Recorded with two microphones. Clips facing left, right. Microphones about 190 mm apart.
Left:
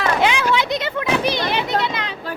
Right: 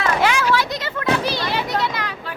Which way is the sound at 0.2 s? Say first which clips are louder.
Even; 20° left (ahead or behind).